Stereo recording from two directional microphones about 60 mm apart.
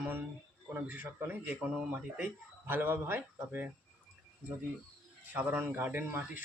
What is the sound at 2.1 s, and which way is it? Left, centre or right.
Speech, right.